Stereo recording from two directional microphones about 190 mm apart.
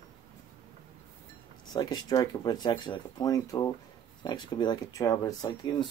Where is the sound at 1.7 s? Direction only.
20° left (ahead or behind).